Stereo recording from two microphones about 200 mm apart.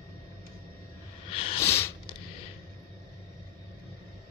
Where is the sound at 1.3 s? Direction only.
30° left (ahead or behind).